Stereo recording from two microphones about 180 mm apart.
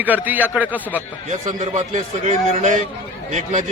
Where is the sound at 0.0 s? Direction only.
10° right (ahead or behind).